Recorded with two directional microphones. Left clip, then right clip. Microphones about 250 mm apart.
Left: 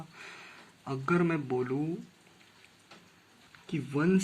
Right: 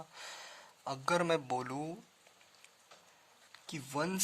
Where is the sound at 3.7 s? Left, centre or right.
Right.